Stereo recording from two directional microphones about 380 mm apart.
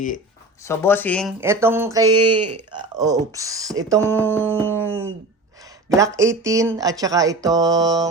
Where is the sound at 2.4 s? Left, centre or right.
Right.